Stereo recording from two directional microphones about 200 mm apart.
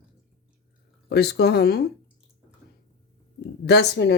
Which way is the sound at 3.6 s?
55° left (ahead or behind).